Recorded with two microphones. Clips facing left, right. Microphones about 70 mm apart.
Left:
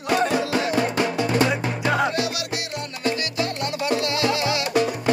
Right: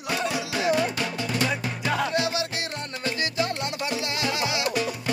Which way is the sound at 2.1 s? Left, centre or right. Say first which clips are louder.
Even; right.